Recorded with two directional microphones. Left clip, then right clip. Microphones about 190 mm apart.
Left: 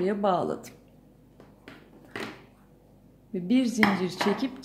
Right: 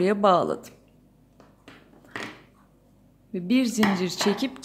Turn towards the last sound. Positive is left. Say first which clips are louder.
# right 2 dB
turn(degrees=-25)  # may be behind; listen again after turning